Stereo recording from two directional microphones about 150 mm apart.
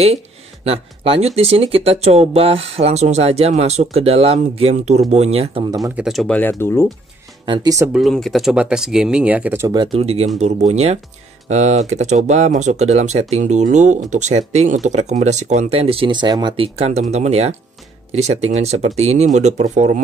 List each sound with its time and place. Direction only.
0.7 s speech: 40° right (ahead or behind)
6.0 s speech: centre (ahead or behind)
7.4 s speech: 35° right (ahead or behind)
7.9 s speech: centre (ahead or behind)
9.9 s speech: 40° right (ahead or behind)